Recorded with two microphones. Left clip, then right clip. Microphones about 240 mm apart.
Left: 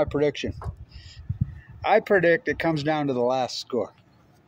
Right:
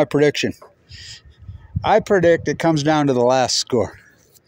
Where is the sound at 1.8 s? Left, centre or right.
Right.